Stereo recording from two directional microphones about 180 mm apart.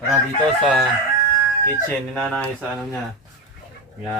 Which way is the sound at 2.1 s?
5° left (ahead or behind).